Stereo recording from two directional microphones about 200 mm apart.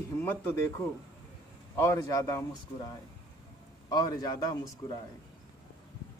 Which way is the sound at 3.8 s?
20° left (ahead or behind).